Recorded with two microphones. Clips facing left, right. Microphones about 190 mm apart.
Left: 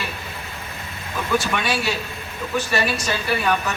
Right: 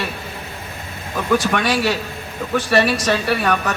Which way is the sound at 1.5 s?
55° right (ahead or behind).